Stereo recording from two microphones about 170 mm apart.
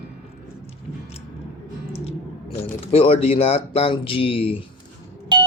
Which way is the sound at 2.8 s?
35° left (ahead or behind).